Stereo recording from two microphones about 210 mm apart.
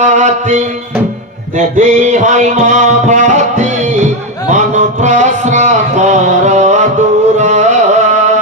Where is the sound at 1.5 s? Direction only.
35° right (ahead or behind).